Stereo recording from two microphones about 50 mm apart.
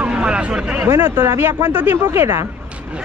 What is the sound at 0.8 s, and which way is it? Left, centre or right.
Speech, right.